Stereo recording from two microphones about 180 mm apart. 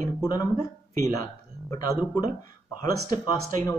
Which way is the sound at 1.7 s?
20° left (ahead or behind).